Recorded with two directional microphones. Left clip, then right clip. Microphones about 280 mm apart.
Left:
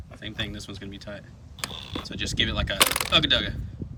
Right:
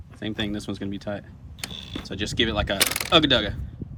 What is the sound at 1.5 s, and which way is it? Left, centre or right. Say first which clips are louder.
Mechanisms: left 1 dB; centre.